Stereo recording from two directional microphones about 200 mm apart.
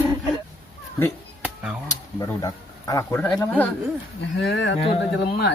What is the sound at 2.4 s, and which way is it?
Speech, 15° left (ahead or behind).